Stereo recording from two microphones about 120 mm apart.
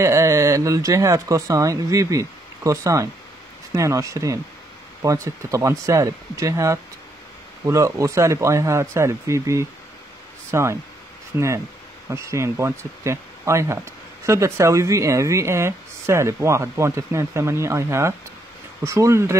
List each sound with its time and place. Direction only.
0.0 s speech: 25° right (ahead or behind)